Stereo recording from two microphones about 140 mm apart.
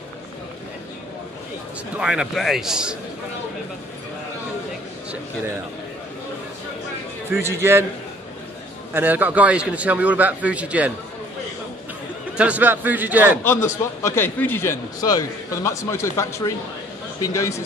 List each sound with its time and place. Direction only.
2.0 s a man's voice: 5° right (ahead or behind)
7.2 s a man's voice: 15° right (ahead or behind)
8.9 s a man's voice: 15° right (ahead or behind)
12.4 s a man's voice: 10° right (ahead or behind)
13.4 s a man's voice: 20° left (ahead or behind)